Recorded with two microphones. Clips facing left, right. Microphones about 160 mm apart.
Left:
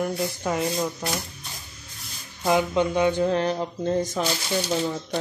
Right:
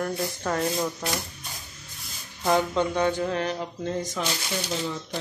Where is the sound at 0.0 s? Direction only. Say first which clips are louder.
Left 2 dB; 10° left (ahead or behind).